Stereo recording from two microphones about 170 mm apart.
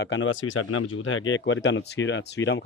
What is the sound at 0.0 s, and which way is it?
Speech, 90° left.